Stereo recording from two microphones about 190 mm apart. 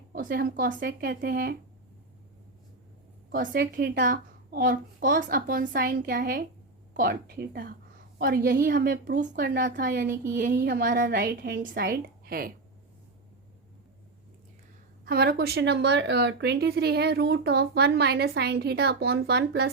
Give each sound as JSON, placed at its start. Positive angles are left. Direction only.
{"t": 0.1, "sound": "a sound", "side_deg": -50}
{"t": 0.5, "sound": "a child's voice", "side_deg": -50}
{"t": 3.3, "sound": "a child's voice", "side_deg": -50}
{"t": 15.0, "sound": "speech", "side_deg": -55}